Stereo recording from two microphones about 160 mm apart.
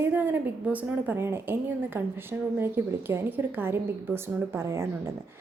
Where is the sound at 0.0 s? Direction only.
10° right (ahead or behind).